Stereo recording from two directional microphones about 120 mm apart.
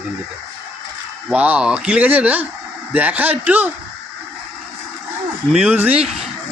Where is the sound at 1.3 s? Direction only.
10° right (ahead or behind).